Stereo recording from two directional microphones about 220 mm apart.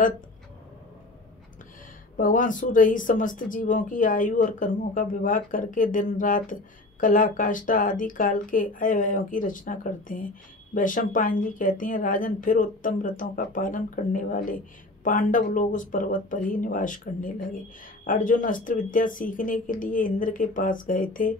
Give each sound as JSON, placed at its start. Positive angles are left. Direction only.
{"t": 2.1, "sound": "speech", "side_deg": 40}